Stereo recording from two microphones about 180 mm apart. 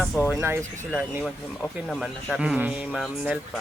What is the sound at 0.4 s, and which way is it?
Speech, 10° right (ahead or behind).